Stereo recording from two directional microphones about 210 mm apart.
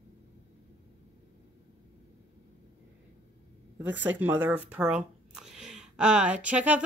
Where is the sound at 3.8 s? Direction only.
10° right (ahead or behind).